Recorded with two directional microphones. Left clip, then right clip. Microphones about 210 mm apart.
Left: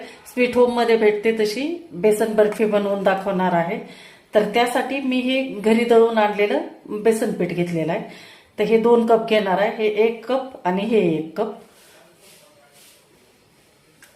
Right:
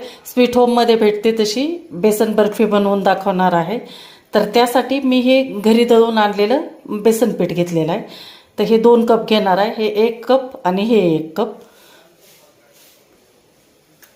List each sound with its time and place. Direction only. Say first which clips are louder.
0.0 s speech: right 5 dB; 30° right (ahead or behind)